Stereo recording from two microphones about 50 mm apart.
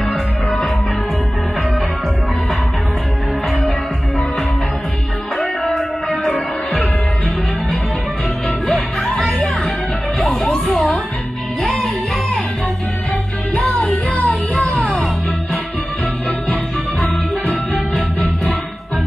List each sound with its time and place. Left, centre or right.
5.4 s music: centre
10.4 s a sound: centre
11.6 s music: centre
13.6 s music: left
17.9 s music: centre